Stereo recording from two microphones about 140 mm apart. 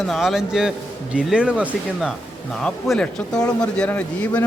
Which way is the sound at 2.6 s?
5° left (ahead or behind).